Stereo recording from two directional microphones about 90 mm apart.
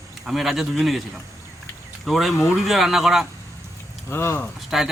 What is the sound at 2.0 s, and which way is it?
Speech, centre (ahead or behind).